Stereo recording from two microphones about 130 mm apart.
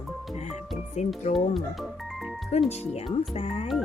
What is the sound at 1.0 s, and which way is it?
Speech, 60° left (ahead or behind).